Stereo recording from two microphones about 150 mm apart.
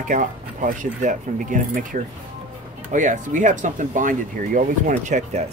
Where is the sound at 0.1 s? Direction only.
55° right (ahead or behind).